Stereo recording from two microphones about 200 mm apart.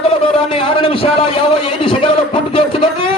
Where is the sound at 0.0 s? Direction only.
30° left (ahead or behind).